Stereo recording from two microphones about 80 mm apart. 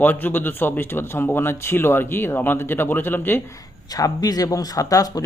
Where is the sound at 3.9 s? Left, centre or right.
Left.